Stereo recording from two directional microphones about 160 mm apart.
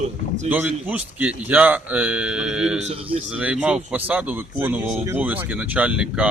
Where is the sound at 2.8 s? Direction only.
45° right (ahead or behind).